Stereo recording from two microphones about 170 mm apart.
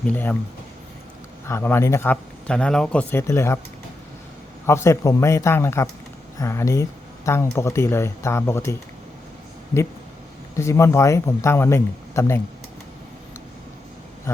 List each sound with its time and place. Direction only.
0.0 s speech: 10° left (ahead or behind)
1.5 s speech: 15° left (ahead or behind)
4.6 s speech: 15° left (ahead or behind)
10.6 s speech: 15° left (ahead or behind)